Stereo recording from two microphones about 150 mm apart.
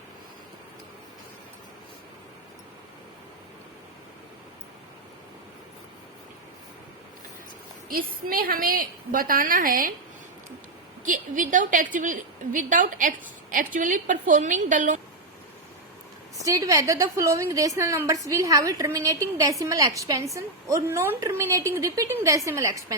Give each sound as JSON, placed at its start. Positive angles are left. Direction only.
{"t": 7.9, "sound": "a woman's voice", "side_deg": -75}
{"t": 11.0, "sound": "a woman's voice", "side_deg": -60}
{"t": 16.4, "sound": "a woman's voice", "side_deg": -25}